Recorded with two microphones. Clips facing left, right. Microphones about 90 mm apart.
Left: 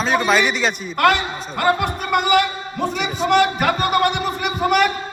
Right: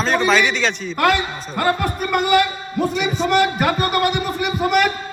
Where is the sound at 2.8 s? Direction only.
Centre (ahead or behind).